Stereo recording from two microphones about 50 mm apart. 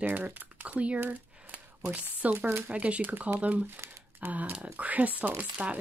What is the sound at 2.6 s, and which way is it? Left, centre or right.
Speech, right.